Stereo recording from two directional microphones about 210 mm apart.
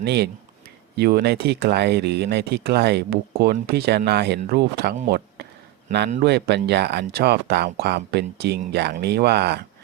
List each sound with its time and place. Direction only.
0.0 s speech: 55° right (ahead or behind)
5.0 s a sound: 50° right (ahead or behind)
6.2 s speech: 50° right (ahead or behind)